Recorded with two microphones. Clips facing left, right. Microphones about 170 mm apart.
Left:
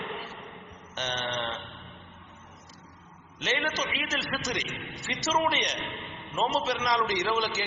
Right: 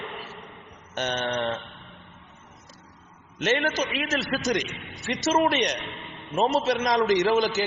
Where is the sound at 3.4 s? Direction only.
50° right (ahead or behind).